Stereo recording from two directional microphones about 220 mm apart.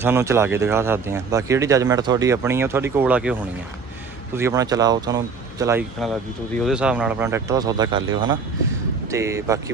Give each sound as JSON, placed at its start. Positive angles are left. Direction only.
{"t": 0.0, "sound": "speech", "side_deg": -10}
{"t": 4.4, "sound": "speech", "side_deg": -15}
{"t": 6.7, "sound": "speech", "side_deg": -5}